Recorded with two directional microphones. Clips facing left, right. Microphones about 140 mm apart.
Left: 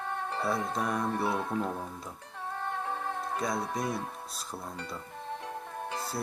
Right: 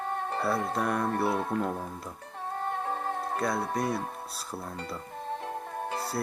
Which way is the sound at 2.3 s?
45° right (ahead or behind).